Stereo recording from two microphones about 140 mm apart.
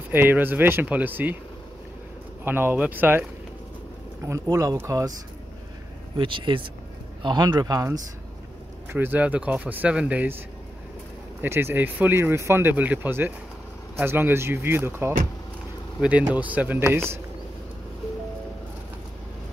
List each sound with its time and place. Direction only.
0.1 s speech: 15° right (ahead or behind)
2.4 s speech: 15° right (ahead or behind)
4.3 s speech: 25° right (ahead or behind)
6.1 s speech: 35° right (ahead or behind)
8.9 s speech: 15° right (ahead or behind)
11.4 s speech: 15° right (ahead or behind)